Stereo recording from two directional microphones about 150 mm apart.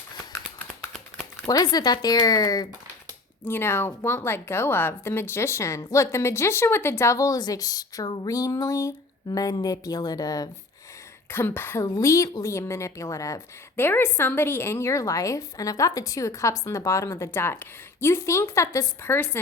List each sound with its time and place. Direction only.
1.5 s a woman's voice: 25° left (ahead or behind)
3.4 s a woman's voice: 15° left (ahead or behind)
11.3 s a woman's voice: 15° left (ahead or behind)